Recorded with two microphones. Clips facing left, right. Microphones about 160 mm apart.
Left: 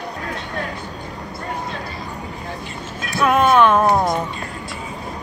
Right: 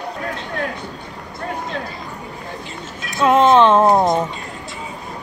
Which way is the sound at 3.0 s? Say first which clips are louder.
Right 3 dB; 20° right (ahead or behind).